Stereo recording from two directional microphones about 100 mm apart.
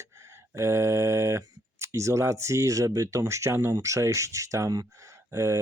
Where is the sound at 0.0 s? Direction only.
25° right (ahead or behind).